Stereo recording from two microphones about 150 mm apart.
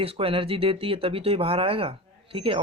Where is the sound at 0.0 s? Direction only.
40° right (ahead or behind).